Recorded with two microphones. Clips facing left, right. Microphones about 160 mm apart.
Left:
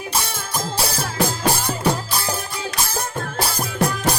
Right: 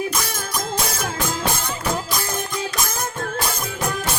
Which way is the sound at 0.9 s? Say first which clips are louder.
Left 2 dB; 35° left (ahead or behind).